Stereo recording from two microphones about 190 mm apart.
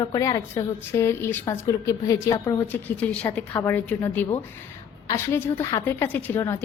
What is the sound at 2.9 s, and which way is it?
A woman's voice, 5° left (ahead or behind).